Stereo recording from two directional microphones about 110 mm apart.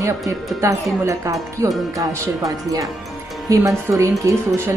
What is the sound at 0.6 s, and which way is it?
A woman's voice, 25° right (ahead or behind).